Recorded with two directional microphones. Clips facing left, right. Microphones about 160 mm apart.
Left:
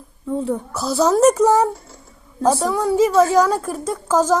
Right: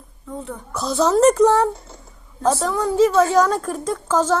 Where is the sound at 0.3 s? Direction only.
30° left (ahead or behind).